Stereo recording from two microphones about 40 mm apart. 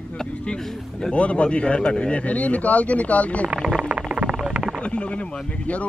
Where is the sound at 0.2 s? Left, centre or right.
Centre.